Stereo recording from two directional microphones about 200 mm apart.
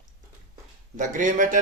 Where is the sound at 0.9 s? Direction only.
40° right (ahead or behind).